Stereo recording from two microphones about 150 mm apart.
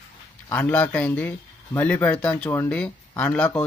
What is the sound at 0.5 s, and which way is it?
Speech, 10° left (ahead or behind).